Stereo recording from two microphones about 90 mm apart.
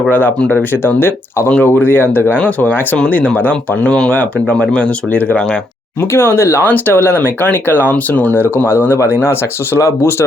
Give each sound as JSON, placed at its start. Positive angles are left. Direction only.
{"t": 0.1, "sound": "speech", "side_deg": 20}
{"t": 6.1, "sound": "speech", "side_deg": 25}